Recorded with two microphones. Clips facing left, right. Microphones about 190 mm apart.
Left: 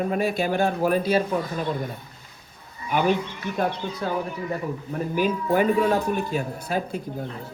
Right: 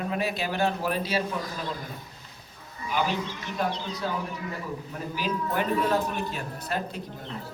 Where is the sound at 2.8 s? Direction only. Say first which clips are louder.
Left 6 dB; 55° left (ahead or behind).